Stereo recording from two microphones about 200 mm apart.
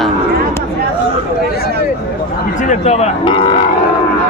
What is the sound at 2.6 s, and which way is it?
Speech, 35° left (ahead or behind).